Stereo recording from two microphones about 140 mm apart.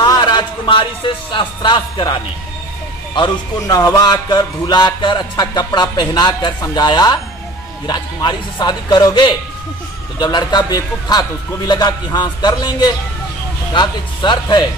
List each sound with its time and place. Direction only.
0.0 s speech: 30° left (ahead or behind)
3.2 s a man's voice: 25° left (ahead or behind)